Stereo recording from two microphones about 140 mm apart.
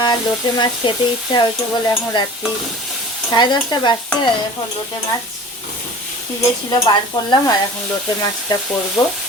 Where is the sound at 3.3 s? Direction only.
30° left (ahead or behind).